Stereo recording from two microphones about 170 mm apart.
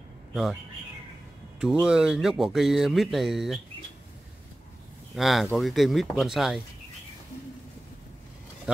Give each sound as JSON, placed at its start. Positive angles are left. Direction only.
{"t": 0.3, "sound": "speech", "side_deg": 0}
{"t": 1.6, "sound": "speech", "side_deg": -5}
{"t": 5.1, "sound": "speech", "side_deg": 0}
{"t": 8.7, "sound": "speech", "side_deg": -5}